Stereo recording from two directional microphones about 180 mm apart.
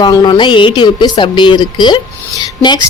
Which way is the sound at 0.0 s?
25° left (ahead or behind).